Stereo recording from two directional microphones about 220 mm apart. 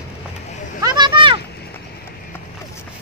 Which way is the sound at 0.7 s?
20° right (ahead or behind).